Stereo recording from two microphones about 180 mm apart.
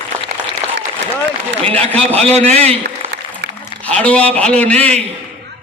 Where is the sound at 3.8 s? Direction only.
5° left (ahead or behind).